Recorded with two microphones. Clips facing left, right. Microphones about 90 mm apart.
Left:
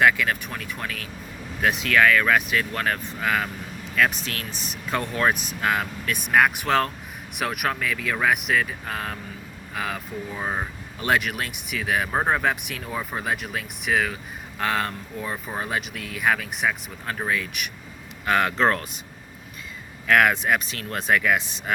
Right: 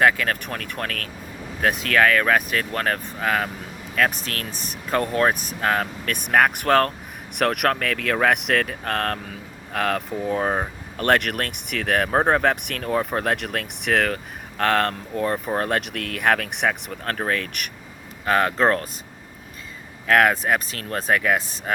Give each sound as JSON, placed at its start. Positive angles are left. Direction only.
{"t": 0.0, "sound": "speech", "side_deg": -45}
{"t": 1.6, "sound": "speech", "side_deg": -40}
{"t": 10.4, "sound": "speech", "side_deg": -40}
{"t": 10.9, "sound": "speech", "side_deg": -60}
{"t": 18.3, "sound": "speech", "side_deg": -35}
{"t": 20.1, "sound": "speech", "side_deg": -35}